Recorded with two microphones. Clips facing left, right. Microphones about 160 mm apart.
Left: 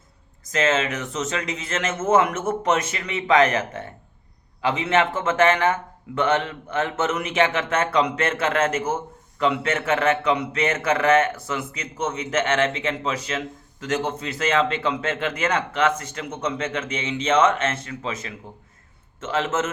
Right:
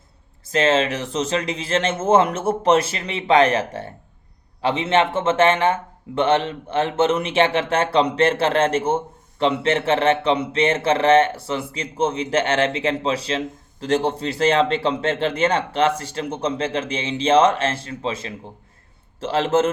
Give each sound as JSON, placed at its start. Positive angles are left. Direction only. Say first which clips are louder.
{"t": 0.4, "sound": "a man's voice", "louder": "right 4 dB", "side_deg": -30}